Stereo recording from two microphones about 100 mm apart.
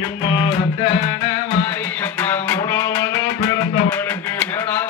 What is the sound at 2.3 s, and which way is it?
Music, 20° left (ahead or behind).